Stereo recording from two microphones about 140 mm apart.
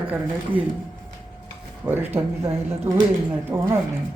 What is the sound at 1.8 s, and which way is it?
A woman's voice, 15° right (ahead or behind).